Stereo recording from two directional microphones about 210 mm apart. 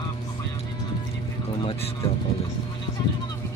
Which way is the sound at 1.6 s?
25° left (ahead or behind).